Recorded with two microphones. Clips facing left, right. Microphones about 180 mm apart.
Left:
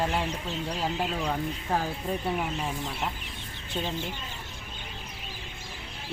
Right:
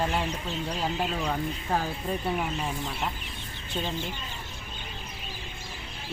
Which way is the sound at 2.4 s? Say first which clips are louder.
Even; 5° left (ahead or behind).